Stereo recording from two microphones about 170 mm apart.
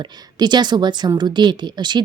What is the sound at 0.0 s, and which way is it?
A woman's voice, 25° right (ahead or behind).